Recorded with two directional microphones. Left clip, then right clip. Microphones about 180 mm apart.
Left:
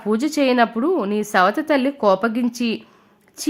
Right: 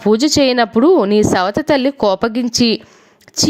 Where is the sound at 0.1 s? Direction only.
35° right (ahead or behind).